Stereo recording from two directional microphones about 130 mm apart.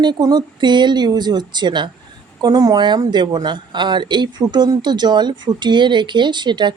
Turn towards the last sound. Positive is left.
turn(degrees=-35)  # may be behind; listen again after turning